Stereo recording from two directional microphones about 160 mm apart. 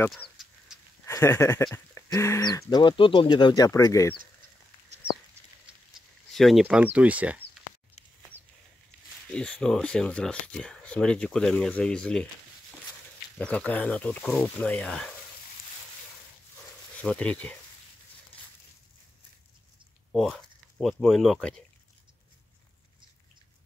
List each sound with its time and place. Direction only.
0.1 s a sound: centre (ahead or behind)
1.0 s speech: 15° left (ahead or behind)
2.7 s speech: 30° left (ahead or behind)
6.3 s speech: centre (ahead or behind)
9.3 s speech: 5° left (ahead or behind)
13.4 s speech: 10° left (ahead or behind)
17.0 s speech: 5° left (ahead or behind)
20.1 s speech: centre (ahead or behind)